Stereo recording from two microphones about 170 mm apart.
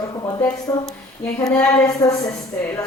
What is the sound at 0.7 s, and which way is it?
A woman's voice, 15° left (ahead or behind).